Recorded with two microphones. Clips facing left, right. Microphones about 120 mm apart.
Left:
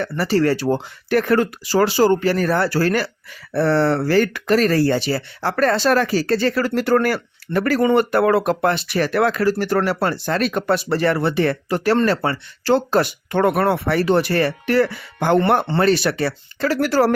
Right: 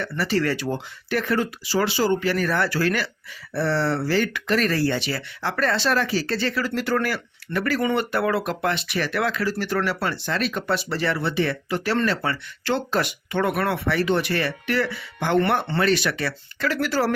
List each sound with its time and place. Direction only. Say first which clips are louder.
0.0 s speech: left 5 dB; 40° left (ahead or behind)
3.5 s speech: left 6 dB; 50° left (ahead or behind)